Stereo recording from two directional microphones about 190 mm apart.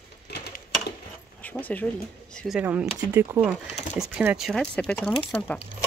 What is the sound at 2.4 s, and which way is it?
Speech, 5° right (ahead or behind).